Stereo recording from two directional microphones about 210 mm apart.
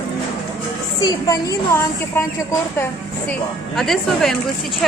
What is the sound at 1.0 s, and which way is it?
A woman's voice, 20° left (ahead or behind).